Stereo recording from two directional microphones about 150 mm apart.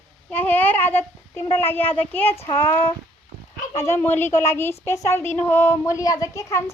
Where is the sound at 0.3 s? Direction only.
10° left (ahead or behind).